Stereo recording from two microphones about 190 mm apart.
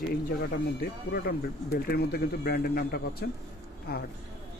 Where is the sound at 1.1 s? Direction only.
50° left (ahead or behind).